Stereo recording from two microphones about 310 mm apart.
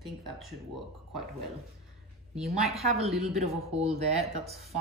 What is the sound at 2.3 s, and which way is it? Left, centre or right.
Speech, centre.